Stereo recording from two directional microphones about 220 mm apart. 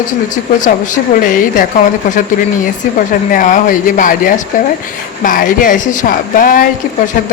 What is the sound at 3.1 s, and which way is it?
Speech, 35° left (ahead or behind).